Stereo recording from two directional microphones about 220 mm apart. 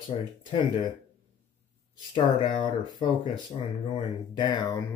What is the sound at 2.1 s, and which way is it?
Speech, 20° left (ahead or behind).